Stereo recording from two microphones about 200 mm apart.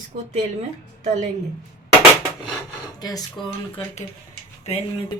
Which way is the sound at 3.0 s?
20° left (ahead or behind).